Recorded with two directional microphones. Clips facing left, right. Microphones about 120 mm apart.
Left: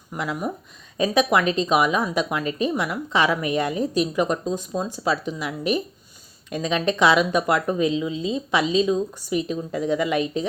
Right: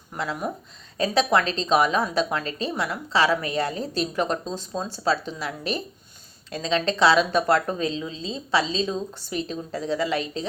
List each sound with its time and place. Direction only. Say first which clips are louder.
0.9 s a woman's voice: left 2 dB; 15° left (ahead or behind)